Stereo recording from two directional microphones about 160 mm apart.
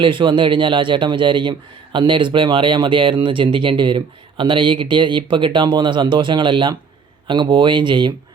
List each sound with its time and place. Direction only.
0.0 s speech: 30° right (ahead or behind)